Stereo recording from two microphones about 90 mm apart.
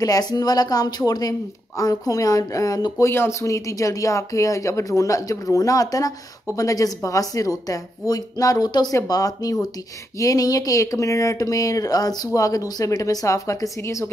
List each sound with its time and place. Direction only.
0.0 s speech: 45° left (ahead or behind)
3.1 s speech: 30° left (ahead or behind)